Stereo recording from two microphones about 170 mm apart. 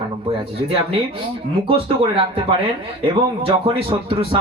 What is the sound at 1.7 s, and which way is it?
Speech, 30° right (ahead or behind).